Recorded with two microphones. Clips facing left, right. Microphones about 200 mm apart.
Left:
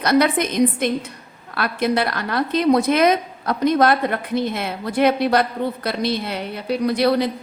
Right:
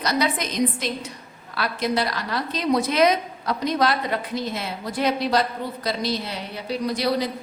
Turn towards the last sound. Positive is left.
turn(degrees=60)  # may be behind; listen again after turning